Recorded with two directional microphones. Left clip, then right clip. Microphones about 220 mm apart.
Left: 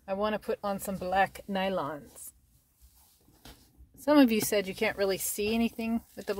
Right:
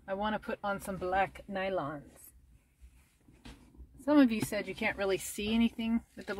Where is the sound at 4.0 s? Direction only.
35° left (ahead or behind).